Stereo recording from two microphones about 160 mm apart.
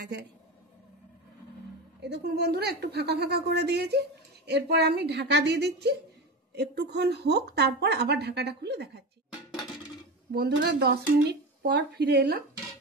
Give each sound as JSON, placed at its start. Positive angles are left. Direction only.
{"t": 0.0, "sound": "speech", "side_deg": -90}
{"t": 2.0, "sound": "speech", "side_deg": -90}
{"t": 10.3, "sound": "speech", "side_deg": -80}